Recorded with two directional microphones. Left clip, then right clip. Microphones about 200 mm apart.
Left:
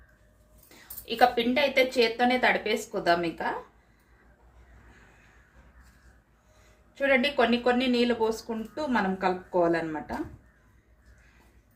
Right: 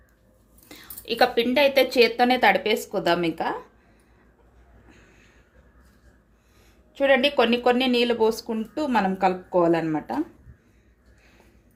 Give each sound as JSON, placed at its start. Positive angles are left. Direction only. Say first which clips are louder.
{"t": 0.7, "sound": "a woman's voice", "louder": "right 5 dB", "side_deg": -50}
{"t": 6.9, "sound": "speech", "louder": "right 5 dB", "side_deg": -40}